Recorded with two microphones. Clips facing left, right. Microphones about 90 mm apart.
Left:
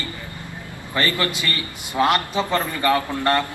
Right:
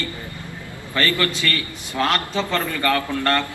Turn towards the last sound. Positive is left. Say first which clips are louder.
# left 1 dB
turn(degrees=20)  # may be behind; listen again after turning